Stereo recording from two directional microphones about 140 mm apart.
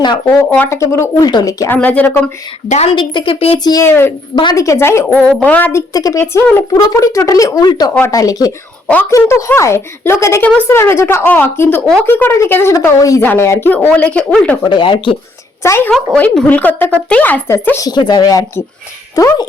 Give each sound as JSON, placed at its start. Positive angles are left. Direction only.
{"t": 0.3, "sound": "a woman's voice", "side_deg": 15}
{"t": 1.7, "sound": "speech", "side_deg": 10}
{"t": 2.6, "sound": "a woman's voice", "side_deg": 50}
{"t": 2.9, "sound": "a woman's voice", "side_deg": 35}
{"t": 3.6, "sound": "a woman's voice", "side_deg": 30}
{"t": 3.8, "sound": "a woman's voice", "side_deg": 15}
{"t": 5.0, "sound": "speech", "side_deg": 10}
{"t": 5.9, "sound": "a woman's voice", "side_deg": 25}
{"t": 14.6, "sound": "a woman's voice", "side_deg": 35}
{"t": 15.6, "sound": "a woman's voice", "side_deg": 20}